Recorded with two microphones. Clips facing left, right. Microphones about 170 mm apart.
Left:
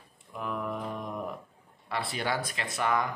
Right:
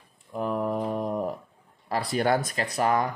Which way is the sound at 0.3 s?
35° right (ahead or behind).